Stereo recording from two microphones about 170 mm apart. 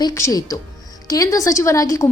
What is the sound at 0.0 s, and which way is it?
A woman's voice, 20° left (ahead or behind).